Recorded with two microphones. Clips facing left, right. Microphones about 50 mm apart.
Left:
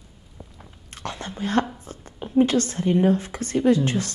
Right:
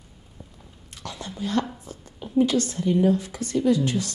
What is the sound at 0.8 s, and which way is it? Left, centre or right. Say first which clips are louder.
Whispering: left 4 dB; left.